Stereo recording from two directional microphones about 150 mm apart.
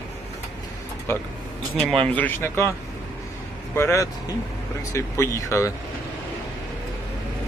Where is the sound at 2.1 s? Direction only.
10° left (ahead or behind).